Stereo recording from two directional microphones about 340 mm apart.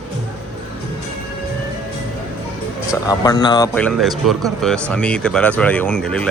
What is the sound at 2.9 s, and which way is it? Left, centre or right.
Speech, centre.